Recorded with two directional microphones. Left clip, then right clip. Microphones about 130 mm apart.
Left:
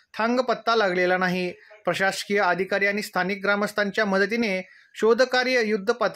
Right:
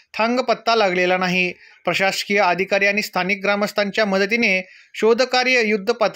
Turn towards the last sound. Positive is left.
turn(degrees=-20)  # may be behind; listen again after turning